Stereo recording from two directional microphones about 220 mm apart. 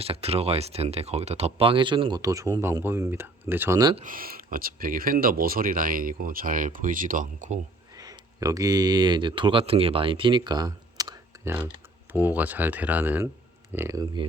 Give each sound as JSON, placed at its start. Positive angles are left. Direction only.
{"t": 0.0, "sound": "speech", "side_deg": -25}
{"t": 4.0, "sound": "speech", "side_deg": -40}
{"t": 7.9, "sound": "speech", "side_deg": -15}